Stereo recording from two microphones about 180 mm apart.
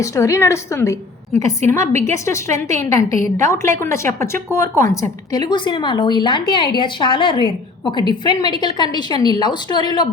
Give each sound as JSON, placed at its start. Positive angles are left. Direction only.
{"t": 0.0, "sound": "a woman's voice", "side_deg": 15}